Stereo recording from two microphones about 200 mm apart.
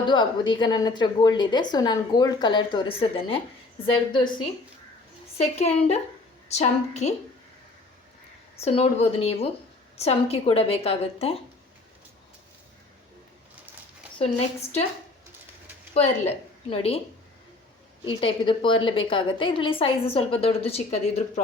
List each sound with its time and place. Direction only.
0.1 s a woman's voice: 25° left (ahead or behind)
5.4 s a woman's voice: 35° left (ahead or behind)
8.5 s a woman's voice: 30° left (ahead or behind)
16.0 s a woman's voice: 30° left (ahead or behind)
18.0 s a woman's voice: 25° left (ahead or behind)